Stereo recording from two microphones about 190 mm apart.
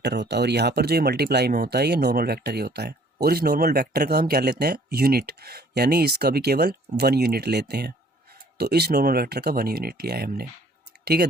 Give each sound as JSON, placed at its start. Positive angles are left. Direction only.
{"t": 0.0, "sound": "speech", "side_deg": -60}